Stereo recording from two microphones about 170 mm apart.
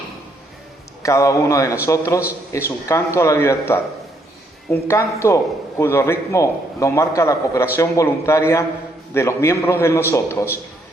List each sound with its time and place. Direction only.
1.0 s a man's voice: 20° left (ahead or behind)